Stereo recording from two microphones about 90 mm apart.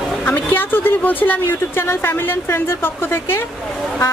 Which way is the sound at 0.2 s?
20° left (ahead or behind).